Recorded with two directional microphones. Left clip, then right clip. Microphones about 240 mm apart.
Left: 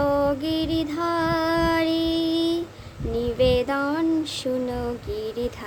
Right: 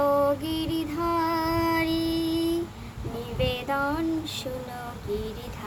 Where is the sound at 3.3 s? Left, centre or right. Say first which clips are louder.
Left 6 dB; left.